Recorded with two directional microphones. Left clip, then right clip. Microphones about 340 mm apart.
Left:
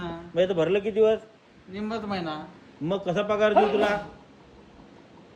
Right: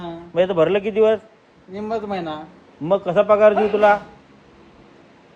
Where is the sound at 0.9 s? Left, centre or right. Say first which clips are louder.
Right 5 dB; centre.